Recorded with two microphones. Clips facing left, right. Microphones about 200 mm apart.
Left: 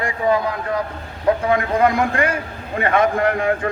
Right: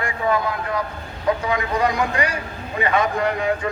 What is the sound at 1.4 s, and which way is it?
A man's voice, 55° left (ahead or behind).